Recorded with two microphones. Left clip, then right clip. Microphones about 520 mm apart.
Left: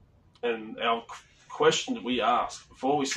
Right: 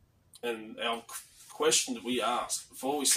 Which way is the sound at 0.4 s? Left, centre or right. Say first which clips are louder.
Left 5 dB; right.